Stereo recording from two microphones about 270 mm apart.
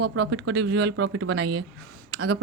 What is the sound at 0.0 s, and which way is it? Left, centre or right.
Speech, right.